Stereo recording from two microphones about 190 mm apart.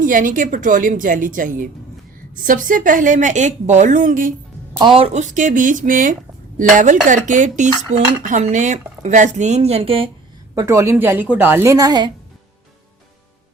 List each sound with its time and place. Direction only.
0.0 s a woman's voice: 45° right (ahead or behind)
4.8 s a woman's voice: 30° right (ahead or behind)
10.5 s a woman's voice: 15° right (ahead or behind)